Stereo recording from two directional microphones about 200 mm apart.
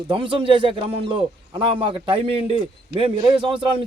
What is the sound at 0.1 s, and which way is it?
A man's voice, 25° right (ahead or behind).